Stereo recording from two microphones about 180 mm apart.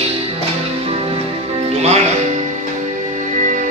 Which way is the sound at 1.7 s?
40° right (ahead or behind).